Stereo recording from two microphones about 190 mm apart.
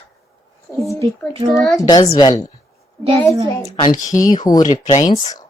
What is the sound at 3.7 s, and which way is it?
Speech, 25° left (ahead or behind).